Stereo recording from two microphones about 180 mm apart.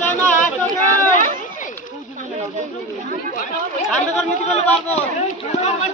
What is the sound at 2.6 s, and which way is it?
Chatter, 45° right (ahead or behind).